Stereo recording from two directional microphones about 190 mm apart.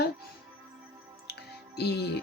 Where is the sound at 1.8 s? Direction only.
60° left (ahead or behind).